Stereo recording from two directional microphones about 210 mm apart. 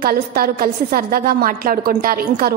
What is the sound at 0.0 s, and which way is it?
A woman's voice, 45° right (ahead or behind).